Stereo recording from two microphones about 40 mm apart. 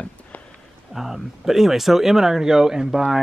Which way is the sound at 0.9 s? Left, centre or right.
Centre.